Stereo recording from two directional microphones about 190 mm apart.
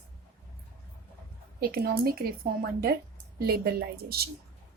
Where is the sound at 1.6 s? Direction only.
55° right (ahead or behind).